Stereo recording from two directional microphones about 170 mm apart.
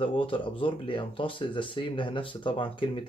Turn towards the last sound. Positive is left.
turn(degrees=30)  # may be behind; listen again after turning